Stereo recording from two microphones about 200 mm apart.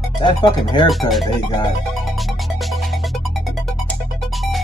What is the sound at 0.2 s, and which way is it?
Speech, 25° left (ahead or behind).